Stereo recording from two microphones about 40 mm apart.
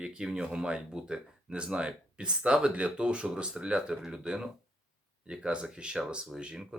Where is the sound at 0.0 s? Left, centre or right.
Centre.